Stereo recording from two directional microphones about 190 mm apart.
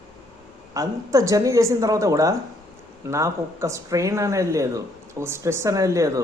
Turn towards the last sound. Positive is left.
turn(degrees=-15)  # may be behind; listen again after turning